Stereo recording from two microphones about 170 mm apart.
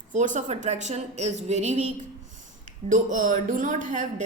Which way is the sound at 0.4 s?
40° right (ahead or behind).